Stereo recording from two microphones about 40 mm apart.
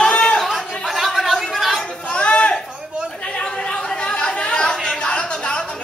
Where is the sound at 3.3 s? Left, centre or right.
Left.